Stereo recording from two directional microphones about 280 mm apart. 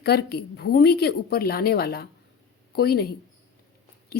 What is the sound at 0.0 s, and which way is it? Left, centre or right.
A woman's voice, left.